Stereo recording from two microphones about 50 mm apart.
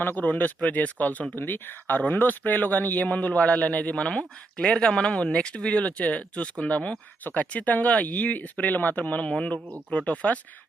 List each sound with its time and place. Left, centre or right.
0.0 s speech: left
1.4 s speech: left